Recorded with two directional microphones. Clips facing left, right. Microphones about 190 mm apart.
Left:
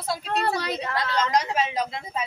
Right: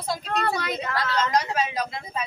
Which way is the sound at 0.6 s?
35° left (ahead or behind).